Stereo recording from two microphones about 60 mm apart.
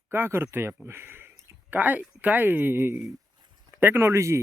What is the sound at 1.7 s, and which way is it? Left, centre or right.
Speech, right.